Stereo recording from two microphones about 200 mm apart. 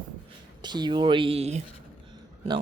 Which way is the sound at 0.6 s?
20° right (ahead or behind).